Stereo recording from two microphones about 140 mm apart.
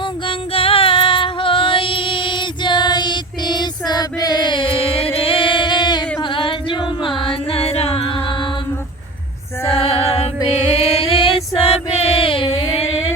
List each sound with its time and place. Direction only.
0.0 s music: 40° left (ahead or behind)
5.1 s singing: 40° left (ahead or behind)
6.1 s music: 35° left (ahead or behind)
9.6 s female singing: 45° left (ahead or behind)
10.6 s chant: 45° left (ahead or behind)